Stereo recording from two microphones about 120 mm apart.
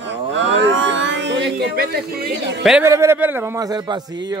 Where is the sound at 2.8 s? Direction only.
20° right (ahead or behind).